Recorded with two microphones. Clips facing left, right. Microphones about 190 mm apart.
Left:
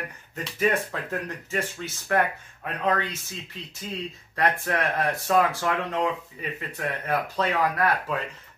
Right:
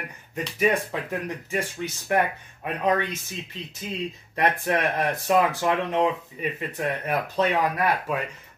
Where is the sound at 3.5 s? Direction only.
20° right (ahead or behind).